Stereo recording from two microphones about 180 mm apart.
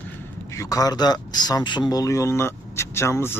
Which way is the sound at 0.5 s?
20° left (ahead or behind).